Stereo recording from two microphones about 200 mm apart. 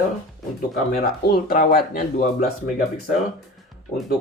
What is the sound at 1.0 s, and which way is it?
Speech, 45° left (ahead or behind).